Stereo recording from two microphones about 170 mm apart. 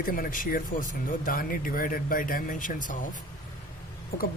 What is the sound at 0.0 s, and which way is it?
Speech, 55° left (ahead or behind).